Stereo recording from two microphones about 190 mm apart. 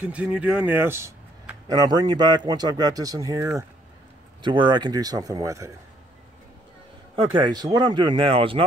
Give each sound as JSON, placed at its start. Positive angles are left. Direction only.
{"t": 0.0, "sound": "speech", "side_deg": -5}
{"t": 7.3, "sound": "speech", "side_deg": -20}